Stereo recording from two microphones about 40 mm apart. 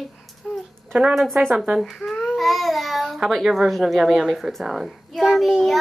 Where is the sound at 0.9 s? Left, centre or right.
Right.